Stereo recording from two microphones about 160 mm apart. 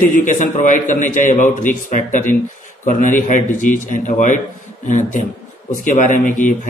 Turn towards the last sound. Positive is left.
turn(degrees=55)  # may be behind; listen again after turning